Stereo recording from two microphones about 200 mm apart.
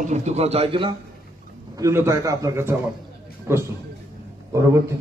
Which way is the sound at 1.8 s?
15° right (ahead or behind).